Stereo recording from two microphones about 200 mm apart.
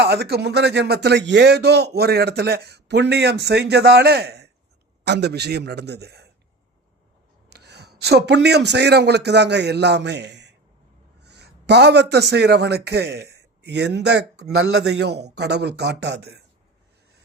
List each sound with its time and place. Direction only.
0.0 s speech: 55° right (ahead or behind)
7.5 s a man's voice: 55° right (ahead or behind)